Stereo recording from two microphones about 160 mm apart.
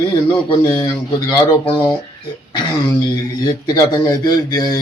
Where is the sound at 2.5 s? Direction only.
30° left (ahead or behind).